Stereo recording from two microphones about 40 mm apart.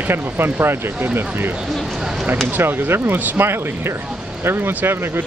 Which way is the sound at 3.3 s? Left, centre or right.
Right.